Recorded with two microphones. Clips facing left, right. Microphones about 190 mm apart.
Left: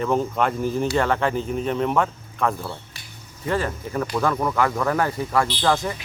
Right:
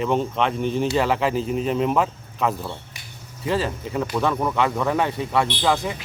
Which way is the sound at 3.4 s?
25° right (ahead or behind).